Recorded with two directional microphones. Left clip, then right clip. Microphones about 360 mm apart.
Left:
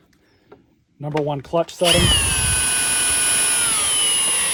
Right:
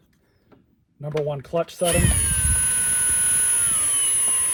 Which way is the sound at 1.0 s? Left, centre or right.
Centre.